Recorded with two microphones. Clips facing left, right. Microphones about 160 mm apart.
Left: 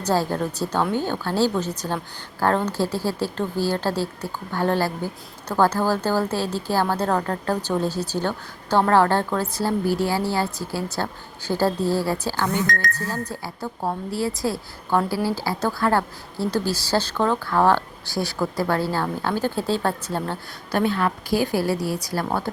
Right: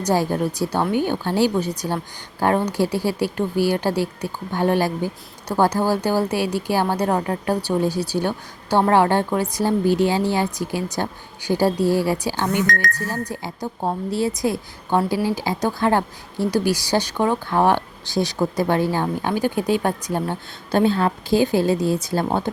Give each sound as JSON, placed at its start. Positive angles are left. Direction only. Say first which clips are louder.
{"t": 0.0, "sound": "speech", "louder": "right 2 dB", "side_deg": -15}
{"t": 20.7, "sound": "a woman's voice", "louder": "right 4 dB", "side_deg": -25}